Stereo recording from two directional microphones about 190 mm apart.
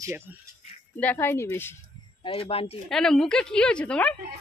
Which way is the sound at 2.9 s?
5° left (ahead or behind).